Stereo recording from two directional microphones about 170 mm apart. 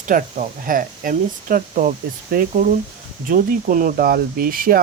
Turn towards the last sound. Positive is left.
turn(degrees=-55)  # may be behind; listen again after turning